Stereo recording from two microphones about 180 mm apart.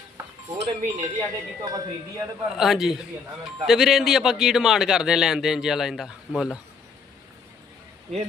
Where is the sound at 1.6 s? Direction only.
20° right (ahead or behind).